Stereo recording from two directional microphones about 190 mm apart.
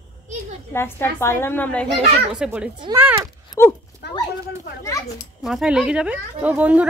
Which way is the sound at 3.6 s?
15° left (ahead or behind).